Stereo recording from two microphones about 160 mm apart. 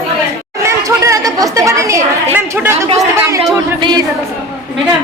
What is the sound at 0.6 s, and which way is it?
Speech, 20° right (ahead or behind).